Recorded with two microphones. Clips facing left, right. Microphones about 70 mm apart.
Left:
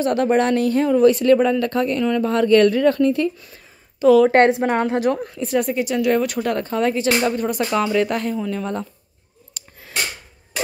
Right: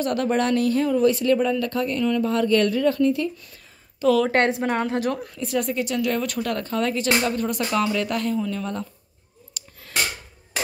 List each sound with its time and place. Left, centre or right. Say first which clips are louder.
0.0 s speech: left 5 dB; left
0.9 s speech: left 8 dB; left
4.0 s speech: left 7 dB; centre
4.3 s speech: left 6 dB; left
5.7 s speech: left 5 dB; centre
9.6 s a sound: left 1 dB; left